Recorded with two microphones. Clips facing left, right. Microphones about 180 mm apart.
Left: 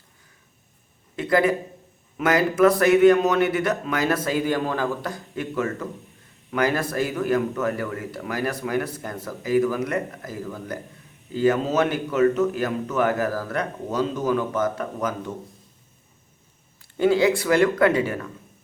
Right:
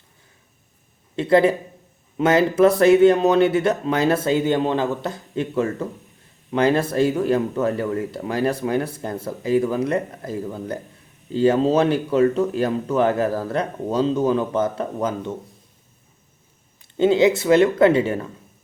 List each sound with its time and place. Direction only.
1.1 s speech: 25° right (ahead or behind)
16.8 s speech: 20° right (ahead or behind)